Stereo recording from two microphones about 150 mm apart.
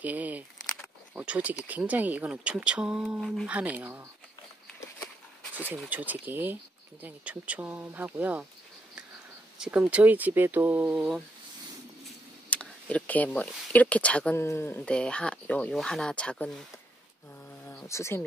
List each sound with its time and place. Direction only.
0.0 s speech: 10° right (ahead or behind)
5.9 s speech: 10° right (ahead or behind)
9.6 s speech: 5° right (ahead or behind)
12.4 s speech: 10° left (ahead or behind)
17.6 s speech: 15° left (ahead or behind)